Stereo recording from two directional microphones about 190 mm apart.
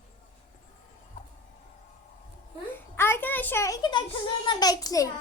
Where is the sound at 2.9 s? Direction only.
10° left (ahead or behind).